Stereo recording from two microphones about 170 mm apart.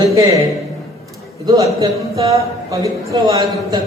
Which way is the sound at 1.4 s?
20° right (ahead or behind).